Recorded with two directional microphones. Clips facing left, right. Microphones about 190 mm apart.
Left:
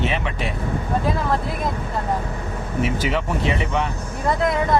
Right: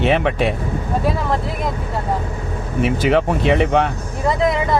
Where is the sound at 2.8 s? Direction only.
60° right (ahead or behind).